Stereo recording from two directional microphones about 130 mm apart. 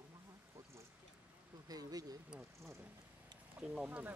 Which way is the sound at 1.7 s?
30° right (ahead or behind).